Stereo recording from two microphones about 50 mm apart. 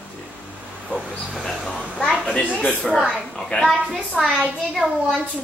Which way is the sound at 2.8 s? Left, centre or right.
Centre.